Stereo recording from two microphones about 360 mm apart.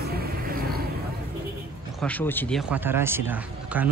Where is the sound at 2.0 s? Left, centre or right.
Centre.